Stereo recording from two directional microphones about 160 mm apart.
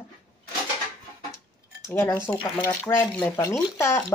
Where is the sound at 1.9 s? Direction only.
15° left (ahead or behind).